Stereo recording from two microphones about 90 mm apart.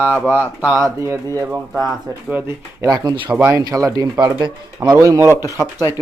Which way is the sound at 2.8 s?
45° right (ahead or behind).